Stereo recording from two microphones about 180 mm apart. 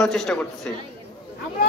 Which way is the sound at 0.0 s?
Centre (ahead or behind).